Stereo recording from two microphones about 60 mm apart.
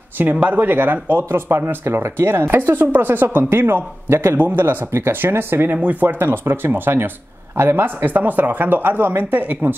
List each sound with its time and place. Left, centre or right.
0.2 s speech: right
4.1 s speech: right
4.6 s speech: right